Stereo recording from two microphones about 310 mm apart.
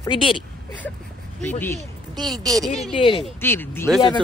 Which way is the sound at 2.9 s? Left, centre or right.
Centre.